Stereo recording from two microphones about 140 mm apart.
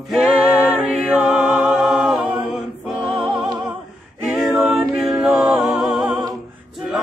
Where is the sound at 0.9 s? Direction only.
5° right (ahead or behind).